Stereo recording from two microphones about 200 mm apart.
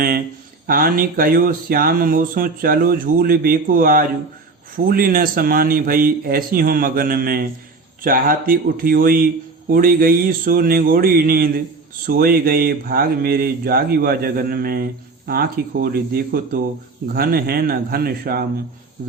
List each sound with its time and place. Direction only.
0.7 s speech: 45° right (ahead or behind)